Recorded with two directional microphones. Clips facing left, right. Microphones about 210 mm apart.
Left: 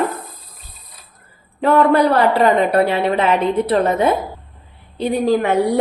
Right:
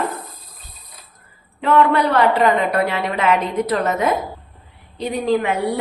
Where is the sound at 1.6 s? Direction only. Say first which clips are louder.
Left 3 dB; 40° left (ahead or behind).